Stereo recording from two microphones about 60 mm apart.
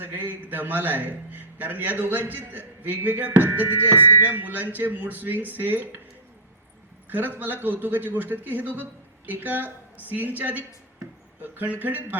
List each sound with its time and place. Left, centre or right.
0.0 s a man's voice: right
7.1 s a man's voice: right